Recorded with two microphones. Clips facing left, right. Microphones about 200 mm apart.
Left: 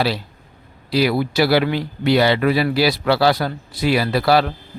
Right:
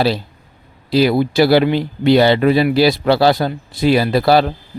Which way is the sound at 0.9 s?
25° right (ahead or behind).